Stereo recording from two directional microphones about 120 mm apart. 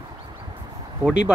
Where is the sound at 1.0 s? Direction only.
10° right (ahead or behind).